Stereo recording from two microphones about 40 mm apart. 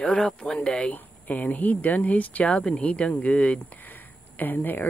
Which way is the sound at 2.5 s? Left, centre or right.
Left.